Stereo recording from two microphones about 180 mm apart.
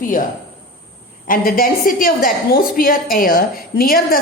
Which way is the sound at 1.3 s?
50° left (ahead or behind).